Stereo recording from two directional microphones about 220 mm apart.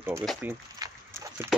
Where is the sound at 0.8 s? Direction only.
15° right (ahead or behind).